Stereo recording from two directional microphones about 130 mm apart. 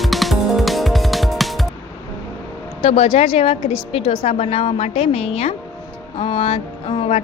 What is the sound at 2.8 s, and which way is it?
A woman's voice, 50° left (ahead or behind).